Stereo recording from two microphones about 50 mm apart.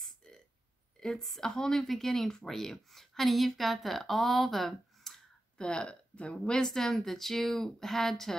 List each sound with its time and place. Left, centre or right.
0.9 s a woman's voice: centre
5.6 s speech: centre